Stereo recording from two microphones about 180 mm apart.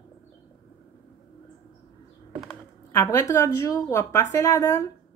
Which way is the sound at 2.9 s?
15° left (ahead or behind).